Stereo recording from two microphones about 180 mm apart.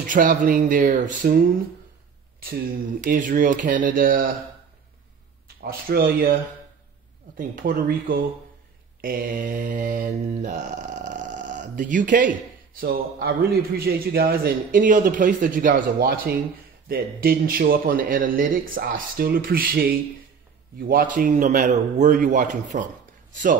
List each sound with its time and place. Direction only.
0.0 s mantra: 45° right (ahead or behind)
2.4 s mantra: 55° right (ahead or behind)
5.6 s a man's voice: 55° right (ahead or behind)
7.3 s mantra: 50° right (ahead or behind)
12.8 s a man's voice: 55° right (ahead or behind)
16.9 s mantra: 55° right (ahead or behind)